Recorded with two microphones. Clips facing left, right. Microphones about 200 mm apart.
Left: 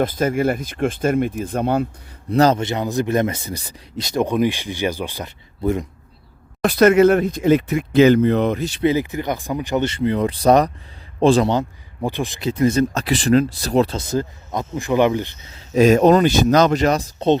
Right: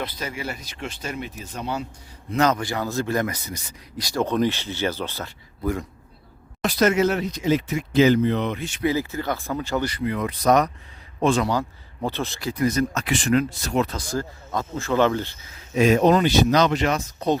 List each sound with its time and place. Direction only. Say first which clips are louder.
0.0 s speech: left 12 dB; 50° left (ahead or behind)
2.3 s speech: left 5 dB; 35° left (ahead or behind)
6.7 s speech: left 7 dB; 60° left (ahead or behind); by 8.8 s 40° left (ahead or behind)
8.8 s speech: left 4 dB; 20° left (ahead or behind)
12.0 s speech: left 4 dB; 15° left (ahead or behind); by 17.3 s 30° left (ahead or behind)